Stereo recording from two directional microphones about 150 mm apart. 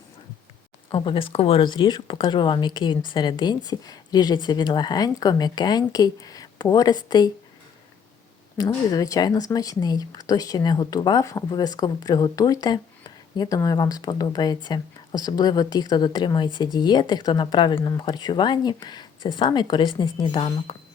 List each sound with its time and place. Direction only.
0.9 s speech: 35° left (ahead or behind)
8.5 s speech: 25° left (ahead or behind)